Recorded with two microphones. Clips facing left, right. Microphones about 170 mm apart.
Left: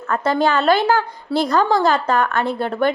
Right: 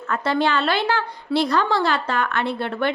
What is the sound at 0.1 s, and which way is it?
A woman's voice, 45° left (ahead or behind).